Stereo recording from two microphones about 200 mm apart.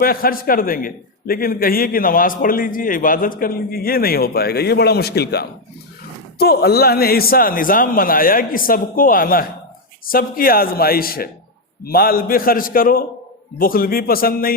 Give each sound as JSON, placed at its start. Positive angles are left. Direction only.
{"t": 0.0, "sound": "a man's voice", "side_deg": 45}